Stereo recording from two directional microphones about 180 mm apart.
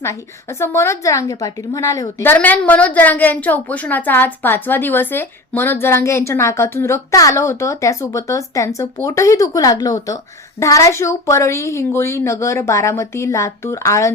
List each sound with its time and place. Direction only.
0.0 s a woman's voice: 15° left (ahead or behind)